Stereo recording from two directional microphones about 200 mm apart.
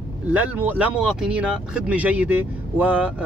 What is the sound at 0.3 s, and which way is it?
Speech, 10° right (ahead or behind).